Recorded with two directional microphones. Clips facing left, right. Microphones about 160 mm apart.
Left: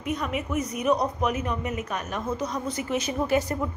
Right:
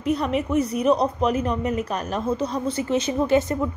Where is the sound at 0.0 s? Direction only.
35° right (ahead or behind).